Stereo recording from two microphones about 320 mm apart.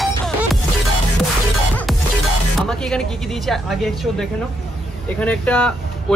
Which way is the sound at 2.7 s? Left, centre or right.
Centre.